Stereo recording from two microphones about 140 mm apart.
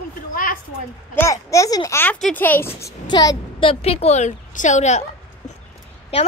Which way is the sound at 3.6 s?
40° left (ahead or behind).